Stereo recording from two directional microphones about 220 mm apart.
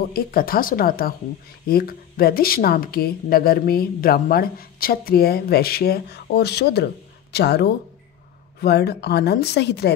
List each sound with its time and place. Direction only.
0.1 s a woman's voice: 40° left (ahead or behind)